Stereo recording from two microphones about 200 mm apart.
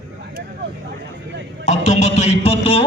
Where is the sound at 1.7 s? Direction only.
35° left (ahead or behind).